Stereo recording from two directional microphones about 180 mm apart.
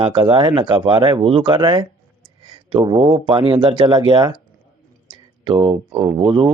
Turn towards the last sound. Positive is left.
turn(degrees=-25)  # may be behind; listen again after turning